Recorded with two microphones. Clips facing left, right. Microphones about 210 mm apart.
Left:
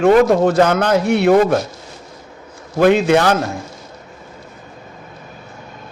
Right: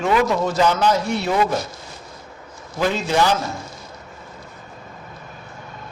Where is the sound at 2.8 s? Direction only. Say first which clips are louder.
Left 8 dB; 65° left (ahead or behind).